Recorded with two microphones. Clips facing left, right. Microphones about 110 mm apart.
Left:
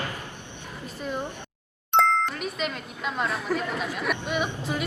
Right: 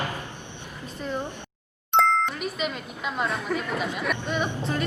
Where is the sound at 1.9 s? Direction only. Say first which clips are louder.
Even; centre (ahead or behind).